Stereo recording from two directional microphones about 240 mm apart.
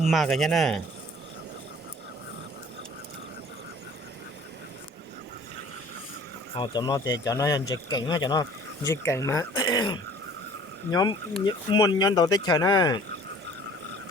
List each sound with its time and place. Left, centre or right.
0.1 s speech: centre
6.6 s speech: centre